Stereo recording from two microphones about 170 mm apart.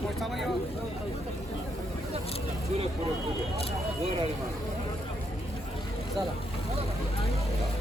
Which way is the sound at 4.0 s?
35° right (ahead or behind).